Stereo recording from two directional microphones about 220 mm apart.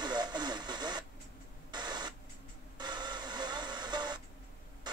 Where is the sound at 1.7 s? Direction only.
20° right (ahead or behind).